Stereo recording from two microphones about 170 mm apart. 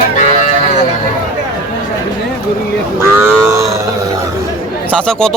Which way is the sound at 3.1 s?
15° right (ahead or behind).